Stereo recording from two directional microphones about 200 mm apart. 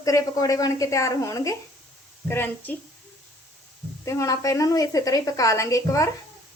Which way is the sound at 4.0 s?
15° left (ahead or behind).